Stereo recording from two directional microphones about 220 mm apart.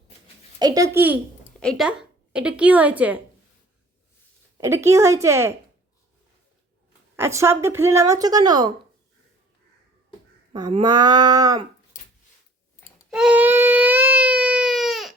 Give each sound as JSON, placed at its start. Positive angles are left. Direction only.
{"t": 0.6, "sound": "speech", "side_deg": -15}
{"t": 1.5, "sound": "a woman's voice", "side_deg": 0}
{"t": 4.5, "sound": "speech", "side_deg": -10}
{"t": 7.2, "sound": "speech", "side_deg": -10}
{"t": 10.5, "sound": "speech", "side_deg": -25}
{"t": 11.9, "sound": "a sound", "side_deg": 35}
{"t": 13.1, "sound": "baby cry", "side_deg": -5}